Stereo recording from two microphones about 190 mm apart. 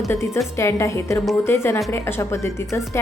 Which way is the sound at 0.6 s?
15° left (ahead or behind).